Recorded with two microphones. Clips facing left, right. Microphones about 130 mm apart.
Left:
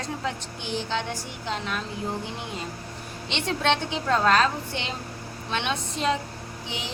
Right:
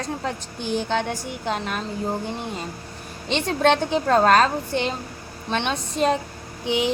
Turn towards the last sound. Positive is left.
turn(degrees=-60)  # may be behind; listen again after turning